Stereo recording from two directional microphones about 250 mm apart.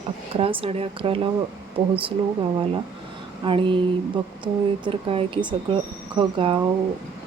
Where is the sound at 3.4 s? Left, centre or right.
Centre.